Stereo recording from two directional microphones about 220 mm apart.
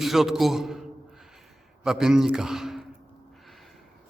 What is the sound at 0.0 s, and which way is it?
Speech, centre (ahead or behind).